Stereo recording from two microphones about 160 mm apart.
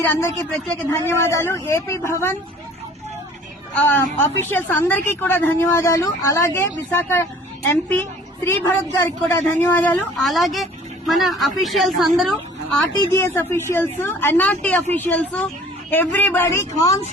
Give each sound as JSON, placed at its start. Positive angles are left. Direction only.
{"t": 0.0, "sound": "a woman's voice", "side_deg": 15}
{"t": 3.8, "sound": "a woman's voice", "side_deg": 15}
{"t": 13.1, "sound": "a woman's voice", "side_deg": 15}